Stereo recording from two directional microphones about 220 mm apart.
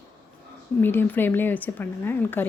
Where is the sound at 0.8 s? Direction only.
10° left (ahead or behind).